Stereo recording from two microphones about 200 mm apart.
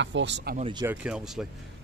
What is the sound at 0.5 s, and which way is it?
Speech, 25° right (ahead or behind).